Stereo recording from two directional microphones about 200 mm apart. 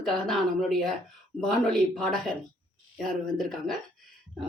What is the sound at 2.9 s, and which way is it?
Speech, centre (ahead or behind).